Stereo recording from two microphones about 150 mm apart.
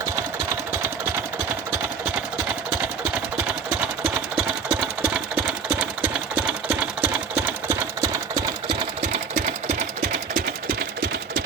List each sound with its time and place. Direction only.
4.4 s engine: 10° right (ahead or behind)
8.6 s sewing machine: 45° right (ahead or behind)
10.0 s engine: 70° right (ahead or behind)